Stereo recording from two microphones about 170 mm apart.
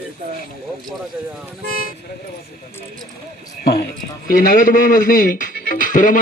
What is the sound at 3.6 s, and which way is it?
A man's voice, 65° left (ahead or behind).